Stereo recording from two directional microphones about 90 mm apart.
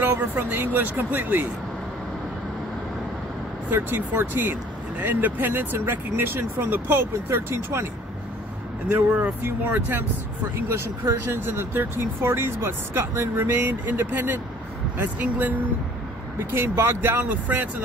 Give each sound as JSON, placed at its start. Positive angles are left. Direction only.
{"t": 0.0, "sound": "speech", "side_deg": -20}
{"t": 3.7, "sound": "speech", "side_deg": -20}
{"t": 8.8, "sound": "speech", "side_deg": -15}
{"t": 11.2, "sound": "speech", "side_deg": -25}